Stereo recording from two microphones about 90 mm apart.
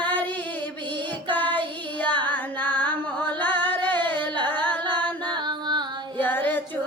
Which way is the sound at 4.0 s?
60° right (ahead or behind).